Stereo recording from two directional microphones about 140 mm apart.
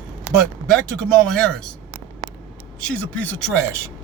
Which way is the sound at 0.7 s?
5° left (ahead or behind).